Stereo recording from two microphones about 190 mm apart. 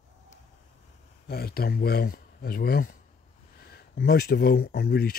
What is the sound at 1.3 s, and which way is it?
Speech, 55° left (ahead or behind).